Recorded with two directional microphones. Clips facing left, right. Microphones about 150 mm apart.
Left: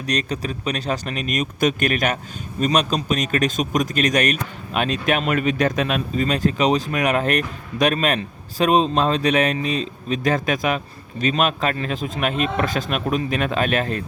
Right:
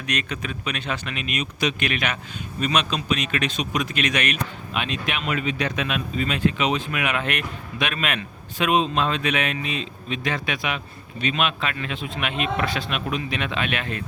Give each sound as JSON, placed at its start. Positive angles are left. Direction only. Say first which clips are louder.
{"t": 0.1, "sound": "speech", "louder": "left 5 dB", "side_deg": 35}